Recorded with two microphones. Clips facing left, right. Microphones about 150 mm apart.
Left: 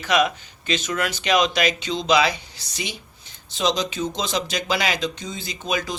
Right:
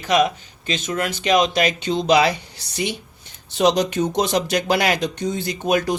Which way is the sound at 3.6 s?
60° right (ahead or behind).